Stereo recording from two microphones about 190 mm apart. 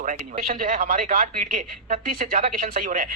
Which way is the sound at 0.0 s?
45° right (ahead or behind).